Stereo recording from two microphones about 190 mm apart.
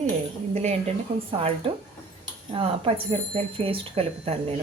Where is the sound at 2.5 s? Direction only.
30° right (ahead or behind).